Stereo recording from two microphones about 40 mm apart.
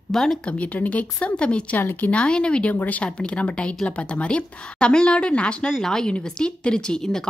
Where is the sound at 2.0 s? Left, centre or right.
Left.